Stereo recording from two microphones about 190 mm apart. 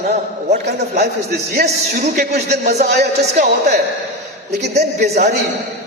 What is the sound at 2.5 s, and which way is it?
Speech, 35° right (ahead or behind).